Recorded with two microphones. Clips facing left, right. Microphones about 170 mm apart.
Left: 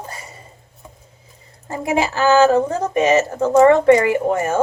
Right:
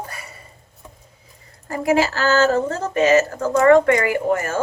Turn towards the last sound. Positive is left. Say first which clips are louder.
# left 2 dB
turn(degrees=20)  # may be behind; listen again after turning